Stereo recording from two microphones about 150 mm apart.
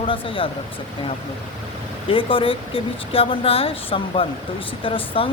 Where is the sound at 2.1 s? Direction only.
35° left (ahead or behind).